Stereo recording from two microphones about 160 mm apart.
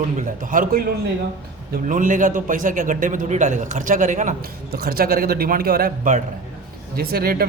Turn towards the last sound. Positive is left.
turn(degrees=-70)  # may be behind; listen again after turning